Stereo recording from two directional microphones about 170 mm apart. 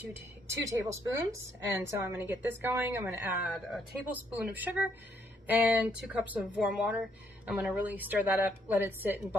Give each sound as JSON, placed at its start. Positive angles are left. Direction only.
{"t": 0.0, "sound": "speech", "side_deg": -15}